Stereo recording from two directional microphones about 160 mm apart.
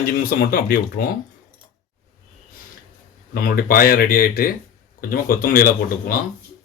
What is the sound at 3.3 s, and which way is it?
Speech, 65° left (ahead or behind).